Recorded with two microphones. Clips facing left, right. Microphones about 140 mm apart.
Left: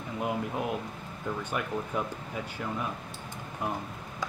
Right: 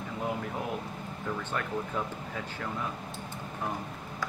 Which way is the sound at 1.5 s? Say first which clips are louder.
Left 2 dB; 10° left (ahead or behind).